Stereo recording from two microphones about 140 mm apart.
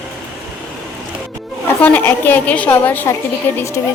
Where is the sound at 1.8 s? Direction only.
10° left (ahead or behind).